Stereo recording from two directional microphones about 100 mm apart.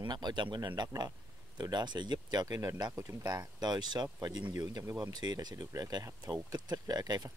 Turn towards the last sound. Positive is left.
turn(degrees=-40)  # may be behind; listen again after turning